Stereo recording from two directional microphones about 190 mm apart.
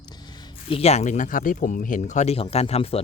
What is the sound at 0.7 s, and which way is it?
Speech, 35° left (ahead or behind).